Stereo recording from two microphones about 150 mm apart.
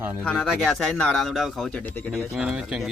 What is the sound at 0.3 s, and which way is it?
Speech, 5° left (ahead or behind).